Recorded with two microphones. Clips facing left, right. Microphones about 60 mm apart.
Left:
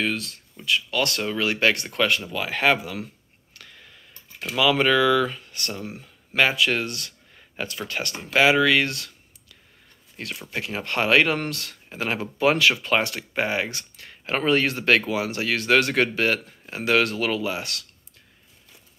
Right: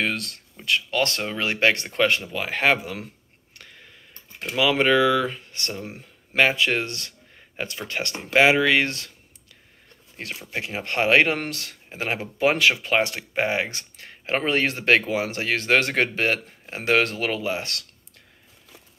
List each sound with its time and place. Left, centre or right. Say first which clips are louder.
0.0 s speech: even; right
0.8 s speech: even; right
3.5 s a sound: even; right
4.6 s speech: even; right
10.1 s speech: even; right